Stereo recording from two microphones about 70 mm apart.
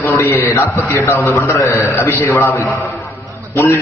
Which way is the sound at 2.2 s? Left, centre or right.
Left.